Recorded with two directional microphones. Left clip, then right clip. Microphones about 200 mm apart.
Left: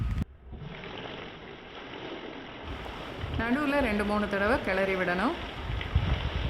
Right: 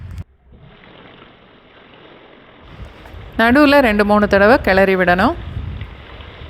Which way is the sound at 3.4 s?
40° right (ahead or behind).